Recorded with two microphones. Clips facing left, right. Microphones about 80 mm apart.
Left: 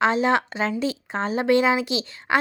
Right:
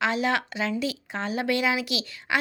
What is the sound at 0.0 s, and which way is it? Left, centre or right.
Speech, left.